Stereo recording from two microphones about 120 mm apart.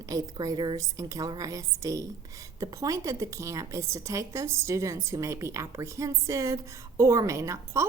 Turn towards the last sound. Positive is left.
turn(degrees=-25)  # may be behind; listen again after turning